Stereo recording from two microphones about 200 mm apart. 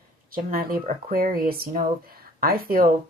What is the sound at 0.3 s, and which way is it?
Speech, 45° right (ahead or behind).